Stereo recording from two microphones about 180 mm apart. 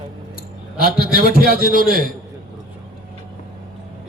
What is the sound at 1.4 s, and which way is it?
Speech, 55° right (ahead or behind).